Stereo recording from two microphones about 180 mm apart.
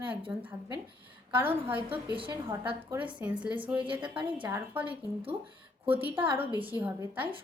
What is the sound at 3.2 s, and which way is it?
Speech, 5° right (ahead or behind).